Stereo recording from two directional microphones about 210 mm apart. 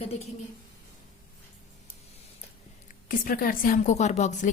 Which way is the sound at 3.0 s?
45° left (ahead or behind).